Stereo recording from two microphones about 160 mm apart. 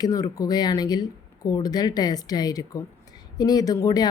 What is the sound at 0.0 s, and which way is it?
Speech, 25° left (ahead or behind).